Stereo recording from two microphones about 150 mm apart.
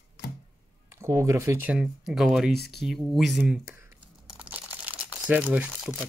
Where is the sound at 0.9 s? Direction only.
20° right (ahead or behind).